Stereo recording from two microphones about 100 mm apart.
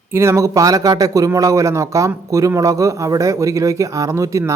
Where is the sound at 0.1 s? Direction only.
25° right (ahead or behind).